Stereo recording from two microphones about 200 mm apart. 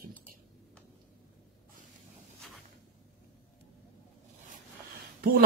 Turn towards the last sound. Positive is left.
turn(degrees=-45)  # may be behind; listen again after turning